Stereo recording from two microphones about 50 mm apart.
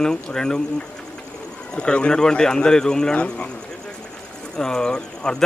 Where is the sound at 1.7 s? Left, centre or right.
Centre.